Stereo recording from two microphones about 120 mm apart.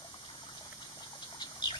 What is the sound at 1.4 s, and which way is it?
Bird, 40° left (ahead or behind).